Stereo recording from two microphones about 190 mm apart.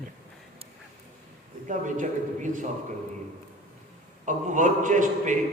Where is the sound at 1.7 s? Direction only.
40° right (ahead or behind).